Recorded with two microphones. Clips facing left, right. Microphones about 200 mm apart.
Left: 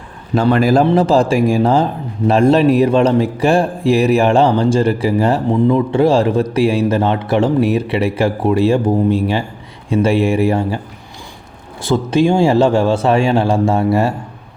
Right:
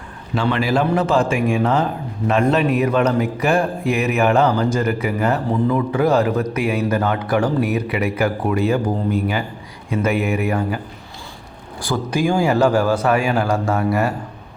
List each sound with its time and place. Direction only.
0.3 s a man's voice: 45° left (ahead or behind)
11.8 s a man's voice: 25° left (ahead or behind)